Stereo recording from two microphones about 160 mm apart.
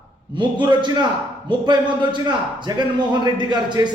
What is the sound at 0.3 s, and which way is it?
A man's voice, 30° right (ahead or behind).